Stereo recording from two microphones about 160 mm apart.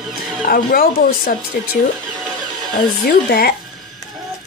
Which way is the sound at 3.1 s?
70° left (ahead or behind).